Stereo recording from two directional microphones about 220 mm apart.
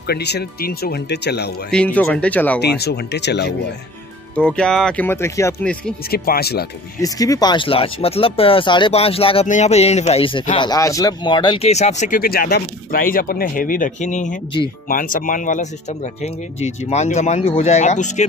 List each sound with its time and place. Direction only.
0.0 s speech: 50° left (ahead or behind)
1.7 s speech: 5° left (ahead or behind)
2.6 s speech: 45° left (ahead or behind)
4.4 s speech: 5° left (ahead or behind)
6.0 s speech: 45° left (ahead or behind)
7.0 s speech: 15° left (ahead or behind); by 18.2 s 35° left (ahead or behind)